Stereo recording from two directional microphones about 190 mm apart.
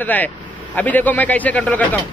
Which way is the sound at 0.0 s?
10° left (ahead or behind).